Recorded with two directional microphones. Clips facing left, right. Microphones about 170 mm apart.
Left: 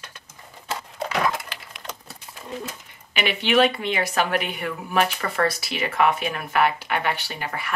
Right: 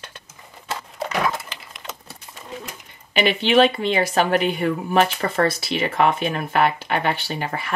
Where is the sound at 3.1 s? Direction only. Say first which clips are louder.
Right 4 dB; 30° right (ahead or behind).